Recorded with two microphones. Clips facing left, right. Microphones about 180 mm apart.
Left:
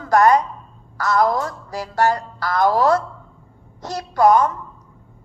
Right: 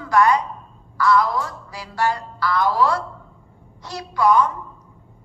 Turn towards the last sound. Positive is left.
turn(degrees=45)  # may be behind; listen again after turning